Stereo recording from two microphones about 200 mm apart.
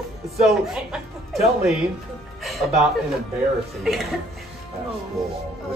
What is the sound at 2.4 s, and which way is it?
Music, centre (ahead or behind).